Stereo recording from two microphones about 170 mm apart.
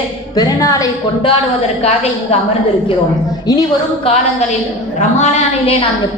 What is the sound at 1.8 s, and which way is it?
Speech, 40° left (ahead or behind).